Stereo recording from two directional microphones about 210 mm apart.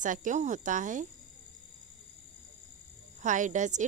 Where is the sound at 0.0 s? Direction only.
35° right (ahead or behind).